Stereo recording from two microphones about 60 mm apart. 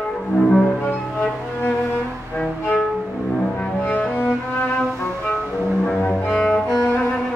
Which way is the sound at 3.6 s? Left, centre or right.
Left.